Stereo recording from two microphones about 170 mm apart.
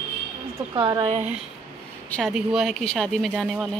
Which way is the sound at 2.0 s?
5° left (ahead or behind).